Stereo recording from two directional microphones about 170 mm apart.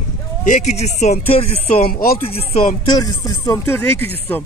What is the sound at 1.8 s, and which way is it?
Speech, 60° left (ahead or behind).